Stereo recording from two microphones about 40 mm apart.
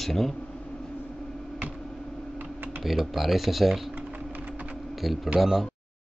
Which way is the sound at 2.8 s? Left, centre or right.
Centre.